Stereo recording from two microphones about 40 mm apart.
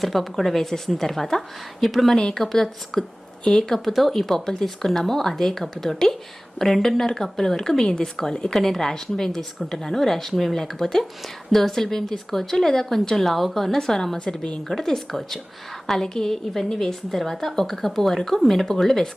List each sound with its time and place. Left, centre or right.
0.0 s a woman's voice: centre
2.1 s speech: centre
2.4 s a woman's voice: centre